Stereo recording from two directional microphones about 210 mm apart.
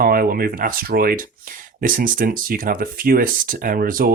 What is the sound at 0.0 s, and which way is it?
Speech, 45° right (ahead or behind).